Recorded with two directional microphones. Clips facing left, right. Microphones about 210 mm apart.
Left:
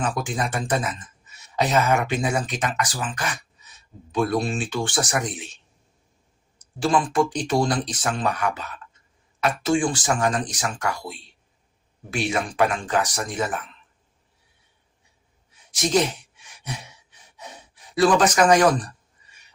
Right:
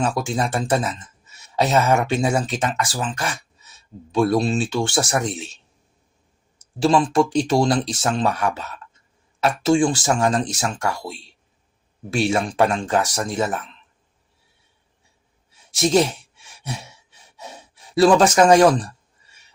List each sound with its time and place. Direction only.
0.0 s speech: 25° right (ahead or behind)
6.6 s speech: 25° right (ahead or behind)
15.7 s speech: 25° right (ahead or behind)
16.6 s gasp: 25° right (ahead or behind)